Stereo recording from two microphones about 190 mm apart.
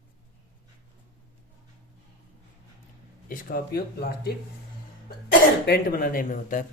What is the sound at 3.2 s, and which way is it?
Speech, 50° left (ahead or behind).